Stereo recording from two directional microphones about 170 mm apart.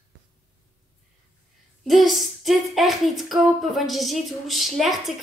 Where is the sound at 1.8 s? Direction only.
Centre (ahead or behind).